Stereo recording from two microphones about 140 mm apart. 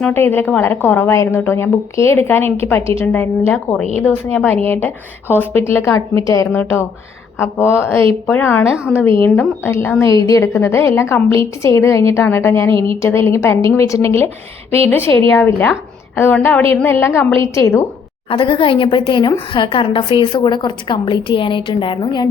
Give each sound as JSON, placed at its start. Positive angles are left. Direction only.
{"t": 0.0, "sound": "a woman's voice", "side_deg": 15}
{"t": 8.7, "sound": "a woman's voice", "side_deg": -5}
{"t": 9.2, "sound": "a woman's voice", "side_deg": 15}
{"t": 18.3, "sound": "a woman's voice", "side_deg": 40}